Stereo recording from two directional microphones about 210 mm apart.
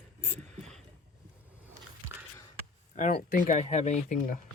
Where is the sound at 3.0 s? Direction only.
35° left (ahead or behind).